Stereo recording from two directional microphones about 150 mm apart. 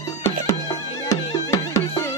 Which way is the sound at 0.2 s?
20° left (ahead or behind).